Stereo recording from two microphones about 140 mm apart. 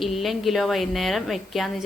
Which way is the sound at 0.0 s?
Centre (ahead or behind).